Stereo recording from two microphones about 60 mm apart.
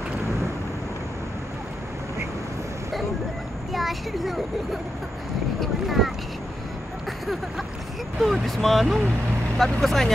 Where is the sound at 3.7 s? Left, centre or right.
Centre.